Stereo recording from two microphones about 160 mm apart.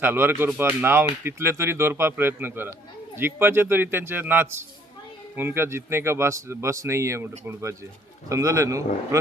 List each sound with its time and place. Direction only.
0.0 s speech: 10° right (ahead or behind)